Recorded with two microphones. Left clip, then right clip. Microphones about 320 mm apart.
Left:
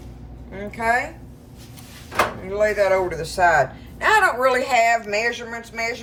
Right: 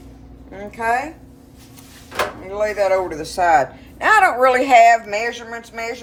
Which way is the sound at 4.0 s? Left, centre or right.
Right.